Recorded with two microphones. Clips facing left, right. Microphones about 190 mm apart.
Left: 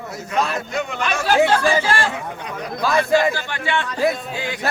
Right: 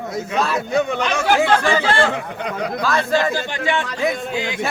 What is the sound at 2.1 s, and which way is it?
Speech, 75° right (ahead or behind).